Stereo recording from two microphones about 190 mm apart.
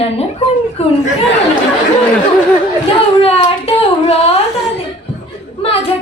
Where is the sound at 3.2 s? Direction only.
30° left (ahead or behind).